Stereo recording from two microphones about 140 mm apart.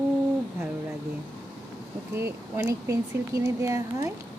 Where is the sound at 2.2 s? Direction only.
15° right (ahead or behind).